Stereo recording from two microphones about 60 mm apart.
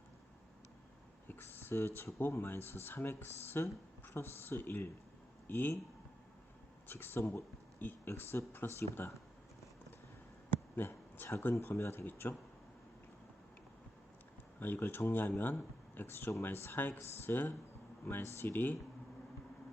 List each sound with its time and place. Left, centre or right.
1.3 s speech: left
6.8 s speech: left
8.1 s speech: left
10.8 s speech: left
14.6 s speech: left